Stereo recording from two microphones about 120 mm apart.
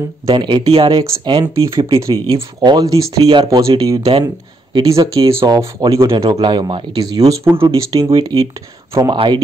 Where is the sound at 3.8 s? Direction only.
30° right (ahead or behind).